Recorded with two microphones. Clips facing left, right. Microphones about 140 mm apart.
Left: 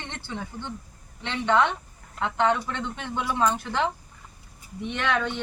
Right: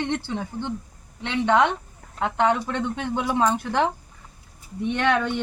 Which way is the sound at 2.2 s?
15° right (ahead or behind).